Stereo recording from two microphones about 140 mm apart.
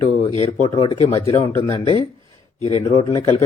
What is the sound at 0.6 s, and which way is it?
Speech, 35° left (ahead or behind).